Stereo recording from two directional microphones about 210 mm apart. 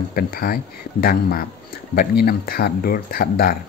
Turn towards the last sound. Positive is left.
turn(degrees=45)  # may be behind; listen again after turning